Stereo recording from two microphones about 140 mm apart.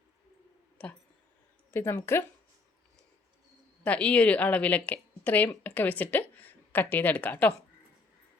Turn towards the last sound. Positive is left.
turn(degrees=10)  # may be behind; listen again after turning